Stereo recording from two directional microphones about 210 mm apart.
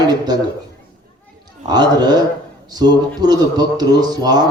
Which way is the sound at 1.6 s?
20° right (ahead or behind).